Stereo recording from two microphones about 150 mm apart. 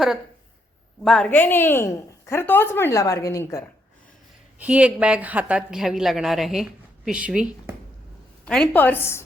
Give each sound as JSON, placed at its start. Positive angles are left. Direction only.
{"t": 1.0, "sound": "a woman's voice", "side_deg": 0}
{"t": 1.3, "sound": "a woman's voice", "side_deg": 15}
{"t": 4.6, "sound": "a woman's voice", "side_deg": -10}
{"t": 8.4, "sound": "a woman's voice", "side_deg": 5}